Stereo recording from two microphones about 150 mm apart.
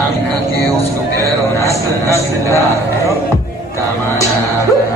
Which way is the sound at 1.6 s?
20° left (ahead or behind).